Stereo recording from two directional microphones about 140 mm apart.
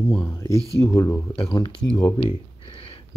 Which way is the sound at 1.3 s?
35° left (ahead or behind).